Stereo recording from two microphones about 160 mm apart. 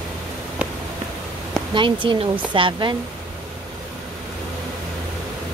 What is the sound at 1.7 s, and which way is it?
Speech, 30° right (ahead or behind).